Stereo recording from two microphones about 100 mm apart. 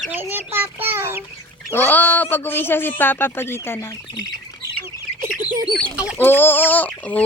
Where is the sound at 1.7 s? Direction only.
20° left (ahead or behind).